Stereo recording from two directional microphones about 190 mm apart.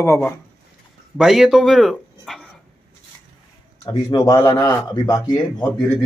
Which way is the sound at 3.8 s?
20° left (ahead or behind).